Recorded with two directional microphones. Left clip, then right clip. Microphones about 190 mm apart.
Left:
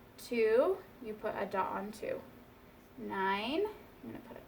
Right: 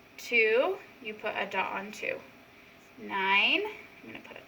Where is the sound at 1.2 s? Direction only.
10° left (ahead or behind).